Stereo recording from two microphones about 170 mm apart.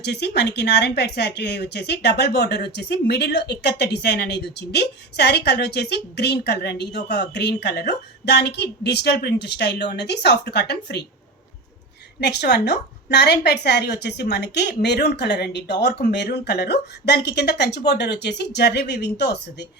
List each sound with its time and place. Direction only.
0.0 s a woman's voice: 80° left
12.2 s a woman's voice: 75° left (ahead or behind)